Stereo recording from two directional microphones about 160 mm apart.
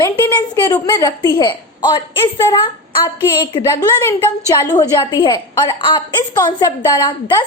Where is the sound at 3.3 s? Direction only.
30° left (ahead or behind).